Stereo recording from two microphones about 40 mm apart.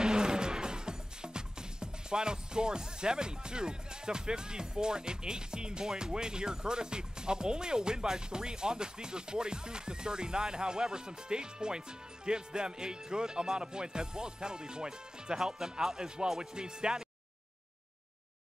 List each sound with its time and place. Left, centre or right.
0.0 s music: centre
12.3 s speech: right